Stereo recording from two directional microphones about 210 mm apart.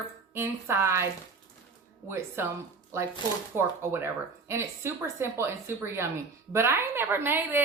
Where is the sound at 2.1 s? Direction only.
10° right (ahead or behind).